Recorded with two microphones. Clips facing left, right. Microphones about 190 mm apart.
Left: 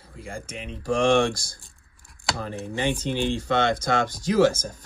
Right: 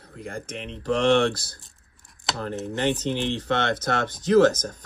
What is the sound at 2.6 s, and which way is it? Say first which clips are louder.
Speech: right 1 dB; 10° left (ahead or behind).